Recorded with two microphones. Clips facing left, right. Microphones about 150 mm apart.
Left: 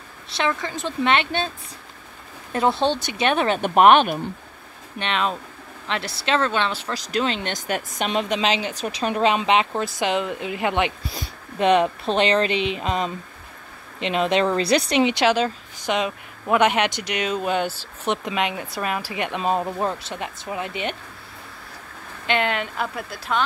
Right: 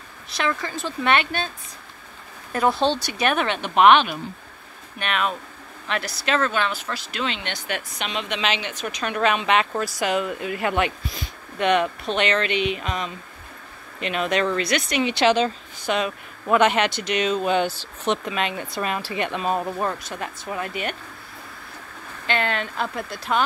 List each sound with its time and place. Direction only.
0.3 s speech: 20° left (ahead or behind)
2.5 s speech: 25° left (ahead or behind)
3.4 s speech: 45° left (ahead or behind)
4.9 s speech: 25° left (ahead or behind)
11.1 s speech: 30° left (ahead or behind)
15.1 s speech: 10° left (ahead or behind)
22.2 s speech: 15° left (ahead or behind)
22.9 s speech: 5° left (ahead or behind)